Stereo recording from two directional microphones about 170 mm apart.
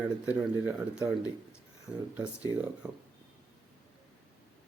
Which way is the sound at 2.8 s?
5° right (ahead or behind).